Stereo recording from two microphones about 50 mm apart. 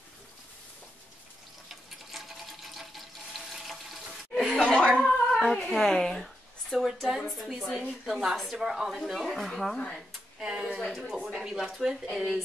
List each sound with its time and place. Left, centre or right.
2.1 s water: centre
4.6 s cough: centre
5.0 s a sound: centre
7.0 s a woman's voice: centre
9.8 s speech: centre
10.4 s a woman's voice: centre